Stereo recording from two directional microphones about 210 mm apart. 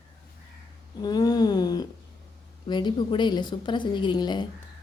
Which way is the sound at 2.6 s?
20° left (ahead or behind).